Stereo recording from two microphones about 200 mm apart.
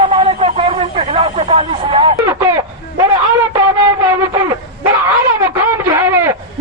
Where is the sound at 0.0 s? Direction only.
25° right (ahead or behind).